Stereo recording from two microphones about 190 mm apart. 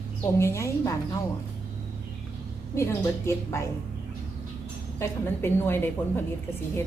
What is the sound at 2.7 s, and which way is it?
Speech, 15° left (ahead or behind).